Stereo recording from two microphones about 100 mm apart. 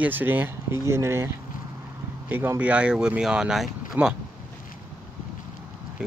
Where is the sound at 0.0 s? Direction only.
20° right (ahead or behind).